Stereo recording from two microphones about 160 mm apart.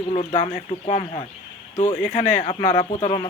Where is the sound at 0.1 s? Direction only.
45° left (ahead or behind).